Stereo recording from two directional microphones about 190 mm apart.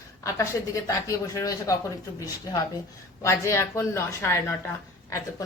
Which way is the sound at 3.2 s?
15° left (ahead or behind).